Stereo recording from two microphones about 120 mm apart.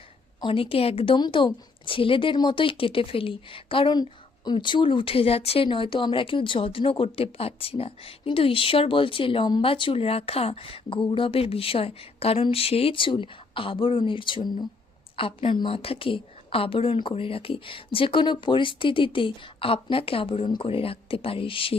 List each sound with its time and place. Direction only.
0.4 s speech: 50° left (ahead or behind)